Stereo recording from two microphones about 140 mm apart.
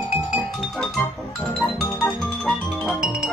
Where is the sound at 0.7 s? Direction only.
5° left (ahead or behind).